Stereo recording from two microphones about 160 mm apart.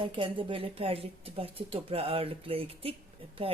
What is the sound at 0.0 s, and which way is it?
Speech, 30° right (ahead or behind).